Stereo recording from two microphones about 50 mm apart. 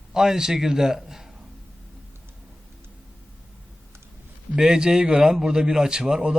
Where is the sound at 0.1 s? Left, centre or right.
Centre.